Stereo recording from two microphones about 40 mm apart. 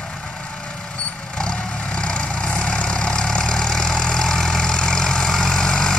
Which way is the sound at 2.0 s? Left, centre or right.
Left.